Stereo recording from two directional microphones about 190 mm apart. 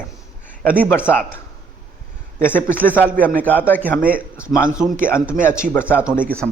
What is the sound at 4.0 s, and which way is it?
Speech, 5° right (ahead or behind).